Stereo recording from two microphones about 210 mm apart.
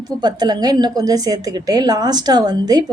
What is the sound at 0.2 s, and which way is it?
A woman's voice, 20° right (ahead or behind).